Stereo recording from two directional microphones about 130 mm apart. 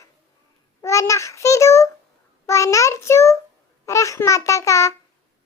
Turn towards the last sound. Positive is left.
turn(degrees=25)  # may be behind; listen again after turning